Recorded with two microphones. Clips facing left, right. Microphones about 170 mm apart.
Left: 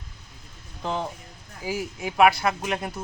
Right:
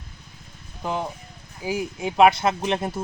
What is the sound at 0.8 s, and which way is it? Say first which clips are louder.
Speech: right 1 dB; 10° right (ahead or behind).